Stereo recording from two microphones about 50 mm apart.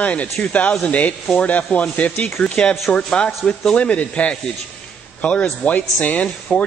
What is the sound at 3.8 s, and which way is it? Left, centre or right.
A man's voice, left.